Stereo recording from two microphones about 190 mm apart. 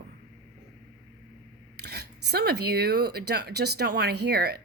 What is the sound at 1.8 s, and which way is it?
Speech, 60° right (ahead or behind).